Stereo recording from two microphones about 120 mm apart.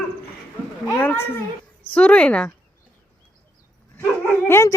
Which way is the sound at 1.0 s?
15° left (ahead or behind).